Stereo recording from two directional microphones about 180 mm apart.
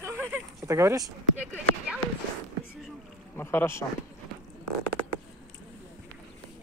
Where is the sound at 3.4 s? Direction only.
15° left (ahead or behind).